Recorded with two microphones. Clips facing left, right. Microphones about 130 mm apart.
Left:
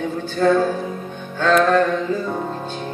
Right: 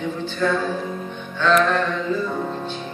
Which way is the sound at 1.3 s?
45° left (ahead or behind).